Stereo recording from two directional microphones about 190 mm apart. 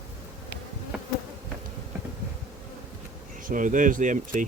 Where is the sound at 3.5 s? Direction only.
45° right (ahead or behind).